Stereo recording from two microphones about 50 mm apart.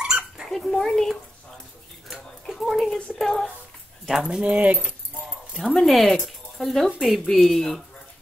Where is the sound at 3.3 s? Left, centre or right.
Centre.